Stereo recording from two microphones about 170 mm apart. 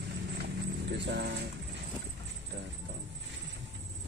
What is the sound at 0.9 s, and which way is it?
Speech, 85° right.